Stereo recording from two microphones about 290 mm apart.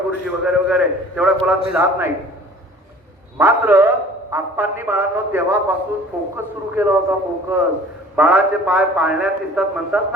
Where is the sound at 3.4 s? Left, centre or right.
Centre.